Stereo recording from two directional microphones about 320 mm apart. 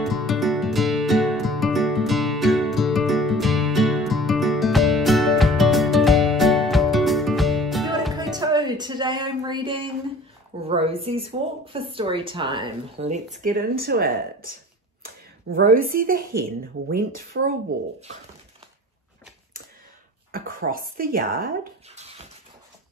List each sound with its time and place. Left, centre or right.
0.0 s music: centre
8.1 s music: centre
10.7 s a woman's voice: centre
20.2 s speech: right